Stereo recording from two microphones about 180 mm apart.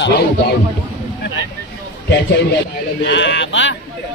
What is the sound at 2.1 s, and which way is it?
Speech, 70° left (ahead or behind).